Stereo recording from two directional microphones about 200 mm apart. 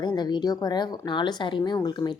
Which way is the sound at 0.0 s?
20° left (ahead or behind).